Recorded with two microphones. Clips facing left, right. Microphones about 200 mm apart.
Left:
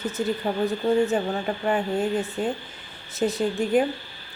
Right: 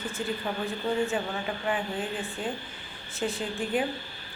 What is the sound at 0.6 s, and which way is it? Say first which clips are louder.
A woman's voice: left 8 dB; 40° left (ahead or behind).